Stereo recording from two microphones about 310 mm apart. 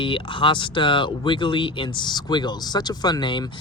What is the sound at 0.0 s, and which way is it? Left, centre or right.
Speech, centre.